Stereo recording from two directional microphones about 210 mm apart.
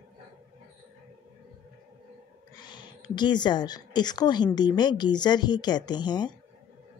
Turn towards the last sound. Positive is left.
turn(degrees=20)  # may be behind; listen again after turning